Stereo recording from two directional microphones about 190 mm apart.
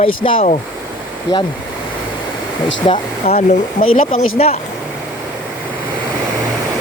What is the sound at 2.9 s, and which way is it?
Speech, 30° left (ahead or behind).